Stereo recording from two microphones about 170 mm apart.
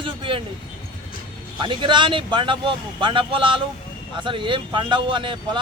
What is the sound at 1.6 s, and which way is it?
Speech, 30° right (ahead or behind).